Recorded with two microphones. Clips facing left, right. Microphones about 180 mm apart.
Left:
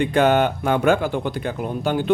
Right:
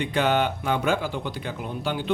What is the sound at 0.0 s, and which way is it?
Speech, 50° left (ahead or behind).